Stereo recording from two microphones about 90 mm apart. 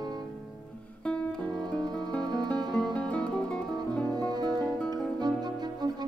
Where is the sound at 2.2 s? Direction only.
50° right (ahead or behind).